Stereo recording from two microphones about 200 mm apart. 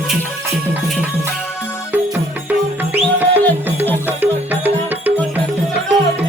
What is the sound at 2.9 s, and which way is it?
Music, 10° right (ahead or behind).